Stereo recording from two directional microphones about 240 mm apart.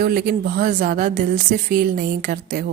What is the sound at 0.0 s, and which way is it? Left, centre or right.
A woman's voice, right.